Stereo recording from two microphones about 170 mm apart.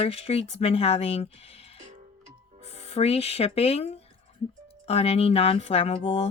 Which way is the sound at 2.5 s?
40° right (ahead or behind).